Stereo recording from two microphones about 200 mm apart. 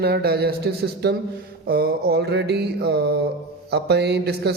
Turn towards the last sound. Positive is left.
turn(degrees=-55)  # may be behind; listen again after turning